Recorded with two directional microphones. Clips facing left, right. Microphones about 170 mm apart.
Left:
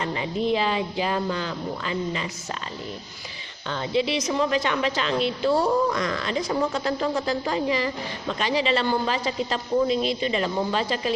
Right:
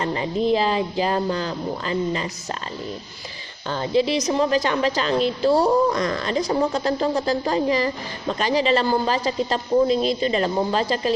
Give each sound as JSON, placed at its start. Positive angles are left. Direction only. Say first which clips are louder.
{"t": 0.0, "sound": "a woman's voice", "louder": "right 4 dB", "side_deg": -40}
{"t": 3.7, "sound": "a woman's voice", "louder": "right 4 dB", "side_deg": -40}